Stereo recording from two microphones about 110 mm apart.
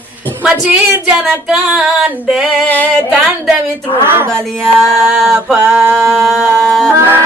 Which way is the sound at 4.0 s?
20° right (ahead or behind).